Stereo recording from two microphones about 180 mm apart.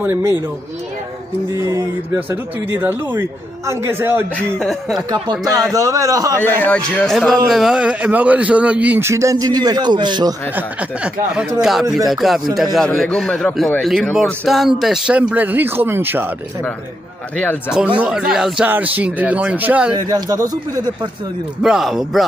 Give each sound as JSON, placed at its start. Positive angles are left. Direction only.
{"t": 0.0, "sound": "a man's voice", "side_deg": -10}
{"t": 1.6, "sound": "a man's voice", "side_deg": -15}
{"t": 4.6, "sound": "a man's voice", "side_deg": 0}
{"t": 5.1, "sound": "a man's voice", "side_deg": -20}
{"t": 6.4, "sound": "a man's voice", "side_deg": 10}
{"t": 10.5, "sound": "a man's voice", "side_deg": -5}
{"t": 12.1, "sound": "a man's voice", "side_deg": 0}
{"t": 17.4, "sound": "a man's voice", "side_deg": 10}
{"t": 17.7, "sound": "a man's voice", "side_deg": -5}
{"t": 20.0, "sound": "speech", "side_deg": -20}
{"t": 21.6, "sound": "a man's voice", "side_deg": 0}